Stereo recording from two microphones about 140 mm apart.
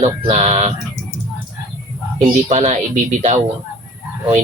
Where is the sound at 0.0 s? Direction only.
50° right (ahead or behind).